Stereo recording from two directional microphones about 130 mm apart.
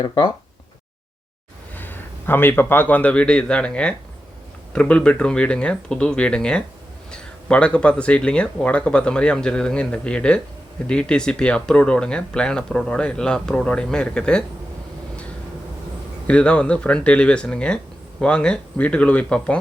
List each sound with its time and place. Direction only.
0.0 s speech: 30° left (ahead or behind)
1.7 s a man's voice: 15° left (ahead or behind)
16.2 s speech: 10° left (ahead or behind)